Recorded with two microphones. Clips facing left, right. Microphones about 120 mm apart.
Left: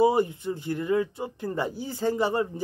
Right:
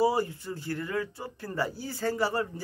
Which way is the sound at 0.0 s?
20° left (ahead or behind).